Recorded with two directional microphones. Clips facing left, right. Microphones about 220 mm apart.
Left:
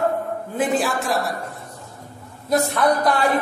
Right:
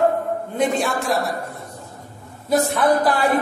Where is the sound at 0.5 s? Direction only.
5° left (ahead or behind).